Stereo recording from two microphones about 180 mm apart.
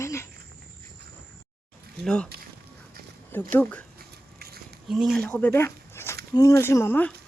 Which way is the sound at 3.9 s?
60° right (ahead or behind).